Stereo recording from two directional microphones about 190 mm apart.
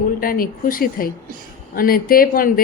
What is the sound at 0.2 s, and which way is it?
A woman's voice, 50° left (ahead or behind).